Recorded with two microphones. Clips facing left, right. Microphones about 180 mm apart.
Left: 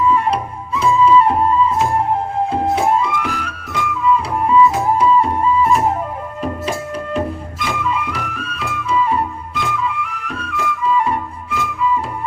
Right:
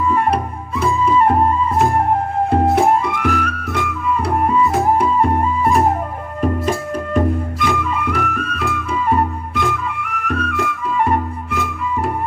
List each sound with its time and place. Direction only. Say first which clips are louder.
0.0 s music: left 1 dB; 55° right (ahead or behind)